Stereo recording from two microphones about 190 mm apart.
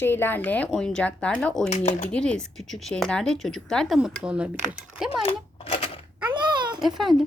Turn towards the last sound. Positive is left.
turn(degrees=0)  # may be behind; listen again after turning